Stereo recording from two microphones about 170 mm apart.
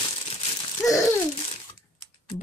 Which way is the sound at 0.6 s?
20° left (ahead or behind).